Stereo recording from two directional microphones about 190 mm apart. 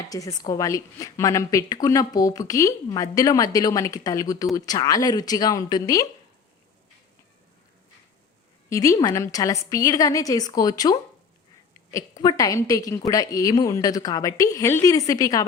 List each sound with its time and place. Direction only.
0.1 s a woman's voice: 20° left (ahead or behind)
8.7 s a woman's voice: 15° left (ahead or behind)